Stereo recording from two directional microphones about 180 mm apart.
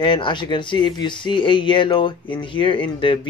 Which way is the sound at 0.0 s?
25° left (ahead or behind).